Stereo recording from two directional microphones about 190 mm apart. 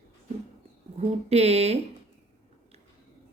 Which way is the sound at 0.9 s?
35° right (ahead or behind).